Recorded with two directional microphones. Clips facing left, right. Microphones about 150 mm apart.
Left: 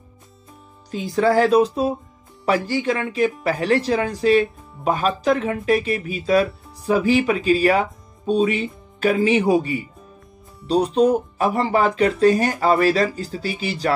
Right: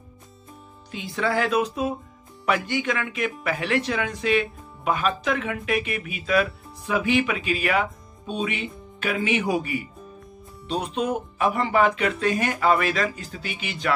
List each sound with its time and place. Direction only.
0.9 s speech: 40° left (ahead or behind)